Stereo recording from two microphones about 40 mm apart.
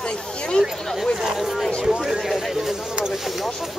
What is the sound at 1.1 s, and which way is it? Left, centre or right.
Speech, centre.